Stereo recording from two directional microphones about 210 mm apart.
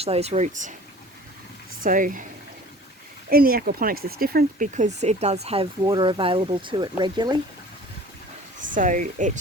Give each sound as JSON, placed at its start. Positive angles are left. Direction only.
{"t": 0.0, "sound": "speech", "side_deg": -30}
{"t": 1.8, "sound": "speech", "side_deg": -40}
{"t": 3.2, "sound": "speech", "side_deg": -45}
{"t": 8.6, "sound": "speech", "side_deg": -40}